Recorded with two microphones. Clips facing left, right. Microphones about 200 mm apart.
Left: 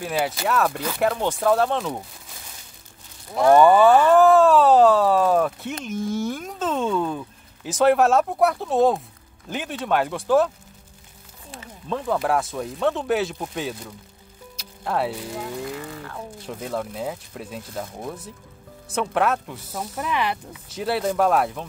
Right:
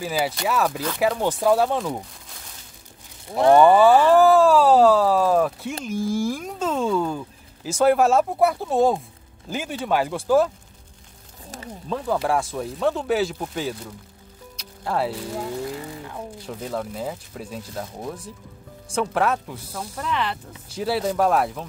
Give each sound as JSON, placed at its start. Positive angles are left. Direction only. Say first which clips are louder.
{"t": 0.0, "sound": "speech", "louder": "even", "side_deg": 0}
{"t": 3.5, "sound": "speech", "louder": "even", "side_deg": 0}
{"t": 11.9, "sound": "speech", "louder": "even", "side_deg": 0}
{"t": 14.6, "sound": "music", "louder": "even", "side_deg": 0}
{"t": 15.3, "sound": "vehicle", "louder": "right 2 dB", "side_deg": -30}
{"t": 15.9, "sound": "speech", "louder": "right 1 dB", "side_deg": -15}
{"t": 16.3, "sound": "speech", "louder": "left 1 dB", "side_deg": 0}
{"t": 20.0, "sound": "speech", "louder": "left 1 dB", "side_deg": 10}
{"t": 20.7, "sound": "speech", "louder": "even", "side_deg": 0}